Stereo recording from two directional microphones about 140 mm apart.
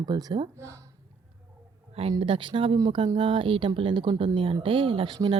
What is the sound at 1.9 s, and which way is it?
Speech, 45° right (ahead or behind).